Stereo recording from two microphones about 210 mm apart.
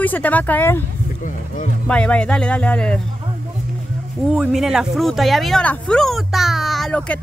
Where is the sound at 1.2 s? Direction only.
35° left (ahead or behind).